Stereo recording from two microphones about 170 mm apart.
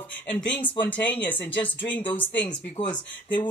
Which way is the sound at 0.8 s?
10° left (ahead or behind).